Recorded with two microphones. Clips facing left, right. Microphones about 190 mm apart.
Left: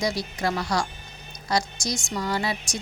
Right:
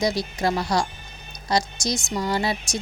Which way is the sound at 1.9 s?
20° right (ahead or behind).